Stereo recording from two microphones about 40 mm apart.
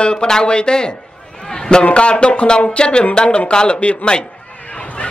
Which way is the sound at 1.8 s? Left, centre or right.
Left.